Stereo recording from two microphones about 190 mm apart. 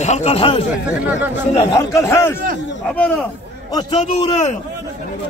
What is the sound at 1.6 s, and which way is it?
A man's voice, 15° left (ahead or behind).